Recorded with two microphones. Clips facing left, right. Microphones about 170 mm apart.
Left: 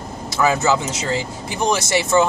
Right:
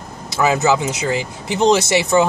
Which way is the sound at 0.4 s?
20° right (ahead or behind).